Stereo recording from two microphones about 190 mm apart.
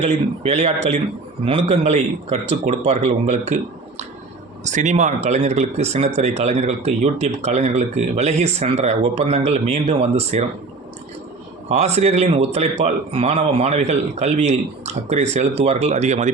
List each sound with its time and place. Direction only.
0.0 s a man's voice: 35° right (ahead or behind)
11.7 s a man's voice: 35° right (ahead or behind)